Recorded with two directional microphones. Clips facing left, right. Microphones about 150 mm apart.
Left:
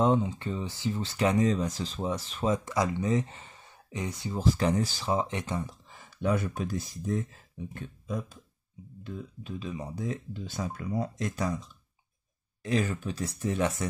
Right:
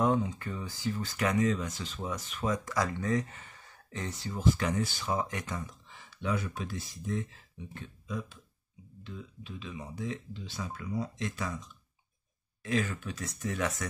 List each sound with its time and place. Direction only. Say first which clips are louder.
0.0 s speech: left 3 dB; 25° left (ahead or behind)
4.4 s speech: left 3 dB; 35° left (ahead or behind)
5.9 s speech: left 5 dB; 45° left (ahead or behind); by 13.8 s 25° left (ahead or behind)